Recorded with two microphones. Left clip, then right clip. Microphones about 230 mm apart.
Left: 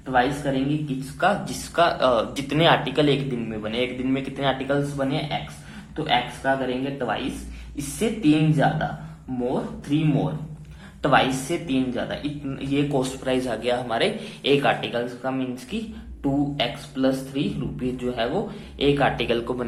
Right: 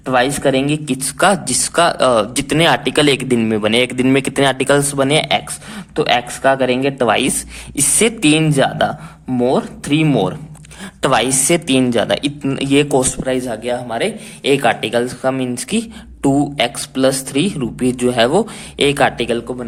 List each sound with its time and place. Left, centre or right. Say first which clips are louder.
0.0 s speech: right 8 dB; right
1.7 s speech: right 6 dB; right
9.9 s speech: right 9 dB; right
13.2 s speech: right 5 dB; right